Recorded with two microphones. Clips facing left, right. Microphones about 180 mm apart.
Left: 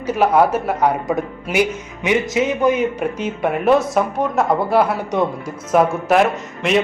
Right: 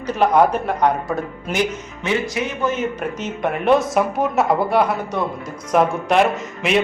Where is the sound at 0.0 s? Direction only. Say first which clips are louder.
Left 1 dB; 5° left (ahead or behind).